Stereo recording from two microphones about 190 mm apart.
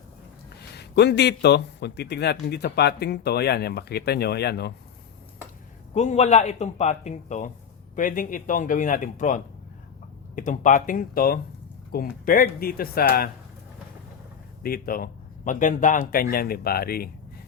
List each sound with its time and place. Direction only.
0.8 s a man's voice: 60° left (ahead or behind)
5.9 s a man's voice: 35° left (ahead or behind); by 13.3 s 50° left (ahead or behind)
14.6 s speech: 50° left (ahead or behind)